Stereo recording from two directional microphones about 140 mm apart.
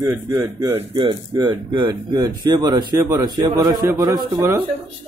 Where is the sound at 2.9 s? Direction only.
20° right (ahead or behind).